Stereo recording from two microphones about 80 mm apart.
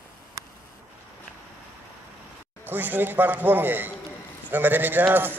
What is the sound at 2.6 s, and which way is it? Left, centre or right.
A man's voice, right.